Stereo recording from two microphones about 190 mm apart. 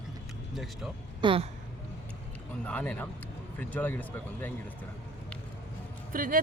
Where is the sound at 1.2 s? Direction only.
25° right (ahead or behind).